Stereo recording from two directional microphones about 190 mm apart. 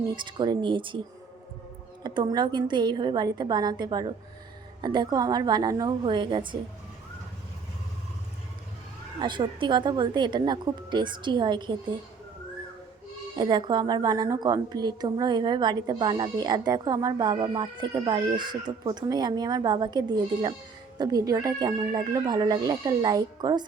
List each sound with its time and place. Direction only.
0.2 s a woman's voice: 25° right (ahead or behind)
2.0 s a woman's voice: 20° right (ahead or behind)
9.2 s a woman's voice: 25° right (ahead or behind)
13.3 s a woman's voice: 20° right (ahead or behind)